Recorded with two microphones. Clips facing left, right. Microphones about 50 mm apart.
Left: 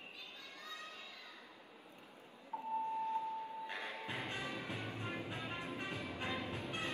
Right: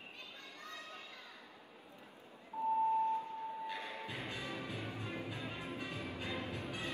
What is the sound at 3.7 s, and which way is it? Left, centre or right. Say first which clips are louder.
Music: even; left.